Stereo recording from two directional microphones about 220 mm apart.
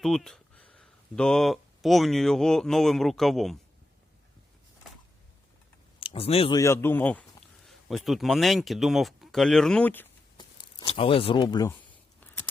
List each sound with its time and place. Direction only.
0.0 s speech: centre (ahead or behind)
6.0 s speech: 25° left (ahead or behind)
6.6 s speech: 10° left (ahead or behind)
10.3 s speech: 20° left (ahead or behind)
12.2 s a sound: 10° left (ahead or behind)